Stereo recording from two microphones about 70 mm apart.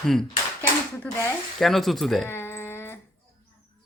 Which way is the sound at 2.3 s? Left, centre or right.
Left.